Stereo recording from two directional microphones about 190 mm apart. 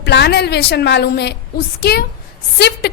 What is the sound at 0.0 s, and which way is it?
A woman's voice, 65° left (ahead or behind).